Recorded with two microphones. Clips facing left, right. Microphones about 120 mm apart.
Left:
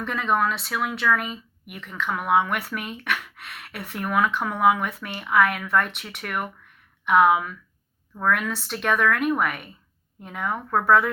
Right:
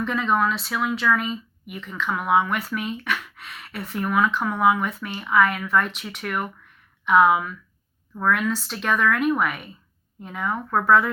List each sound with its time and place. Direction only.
0.0 s speech: 55° left (ahead or behind)
2.0 s speech: 5° right (ahead or behind)
2.5 s speech: 65° left (ahead or behind)
9.1 s speech: centre (ahead or behind)
10.2 s speech: 60° left (ahead or behind)